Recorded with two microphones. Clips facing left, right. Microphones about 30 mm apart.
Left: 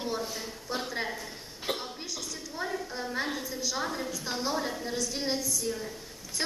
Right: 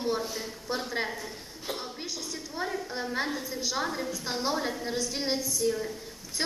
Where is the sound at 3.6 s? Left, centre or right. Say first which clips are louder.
Right 2 dB; centre.